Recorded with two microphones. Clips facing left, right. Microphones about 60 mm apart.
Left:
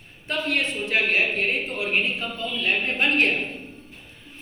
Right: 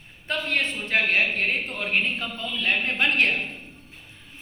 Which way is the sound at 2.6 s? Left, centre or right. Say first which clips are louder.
Even; right.